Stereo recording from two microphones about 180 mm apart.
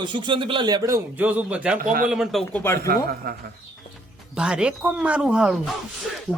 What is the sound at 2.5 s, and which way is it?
Speech, 15° left (ahead or behind).